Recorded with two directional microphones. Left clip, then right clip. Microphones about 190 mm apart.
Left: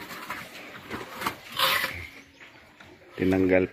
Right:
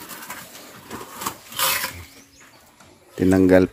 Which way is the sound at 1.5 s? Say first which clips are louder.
Right 1 dB; 10° right (ahead or behind).